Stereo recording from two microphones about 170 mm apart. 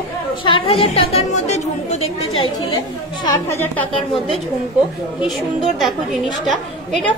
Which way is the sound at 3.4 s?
15° left (ahead or behind).